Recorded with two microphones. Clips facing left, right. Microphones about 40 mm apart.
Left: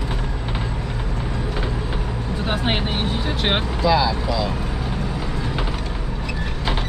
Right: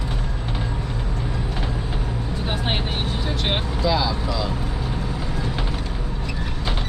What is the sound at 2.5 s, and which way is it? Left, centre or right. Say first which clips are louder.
Vehicle: left 3 dB; centre.